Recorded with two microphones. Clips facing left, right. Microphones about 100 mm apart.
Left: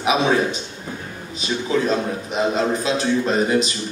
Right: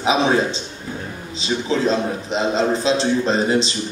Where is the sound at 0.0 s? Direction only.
25° right (ahead or behind).